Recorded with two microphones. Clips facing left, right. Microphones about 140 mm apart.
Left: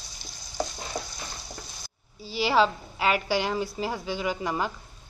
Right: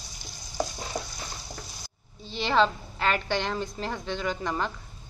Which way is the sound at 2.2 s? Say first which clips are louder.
Left 1 dB; 5° left (ahead or behind).